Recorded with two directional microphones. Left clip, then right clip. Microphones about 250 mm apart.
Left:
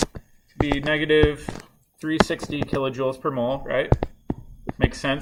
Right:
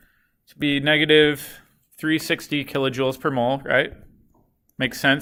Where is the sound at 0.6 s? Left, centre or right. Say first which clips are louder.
Right 4 dB; right.